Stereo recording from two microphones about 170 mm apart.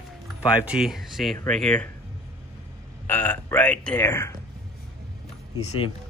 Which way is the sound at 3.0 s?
10° left (ahead or behind).